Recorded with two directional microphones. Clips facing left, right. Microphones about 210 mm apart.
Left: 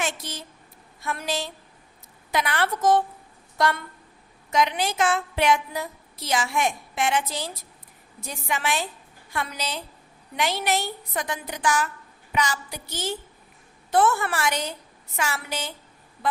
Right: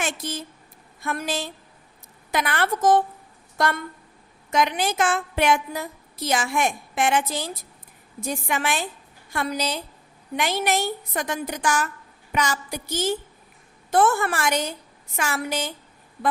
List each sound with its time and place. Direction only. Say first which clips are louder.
0.0 s a woman's voice: right 2 dB; 50° right (ahead or behind)
4.5 s a woman's voice: right 1 dB; 50° right (ahead or behind)